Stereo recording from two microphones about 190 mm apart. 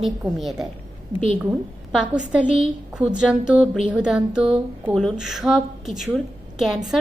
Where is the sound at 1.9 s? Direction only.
5° right (ahead or behind).